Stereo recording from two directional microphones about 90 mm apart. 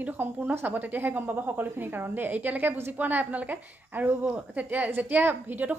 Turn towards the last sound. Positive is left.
turn(degrees=-20)  # may be behind; listen again after turning